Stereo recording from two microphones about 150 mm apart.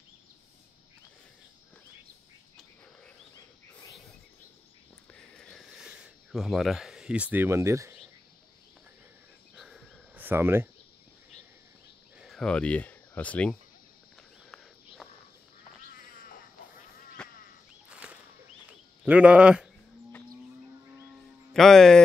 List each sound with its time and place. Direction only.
5.1 s a sound: 5° left (ahead or behind); by 7.9 s 20° right (ahead or behind)
9.6 s a sound: centre (ahead or behind)
10.1 s speech: 15° right (ahead or behind)
12.2 s speech: centre (ahead or behind)
14.1 s walk: centre (ahead or behind)
15.9 s cat: 70° left (ahead or behind)
17.2 s sheep: 5° left (ahead or behind)
17.8 s a sound: 10° right (ahead or behind)
21.5 s speech: centre (ahead or behind)